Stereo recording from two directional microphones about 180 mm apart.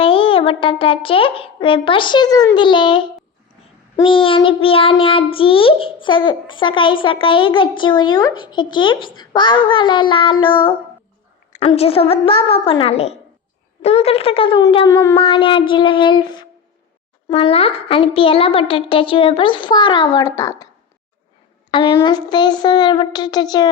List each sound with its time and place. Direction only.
0.0 s speech: 30° left (ahead or behind)
2.6 s child singing: 25° left (ahead or behind)
11.5 s a woman's voice: 35° left (ahead or behind)
15.1 s child singing: 30° left (ahead or behind)
21.7 s a sound: 25° left (ahead or behind)
22.0 s child singing: 25° left (ahead or behind)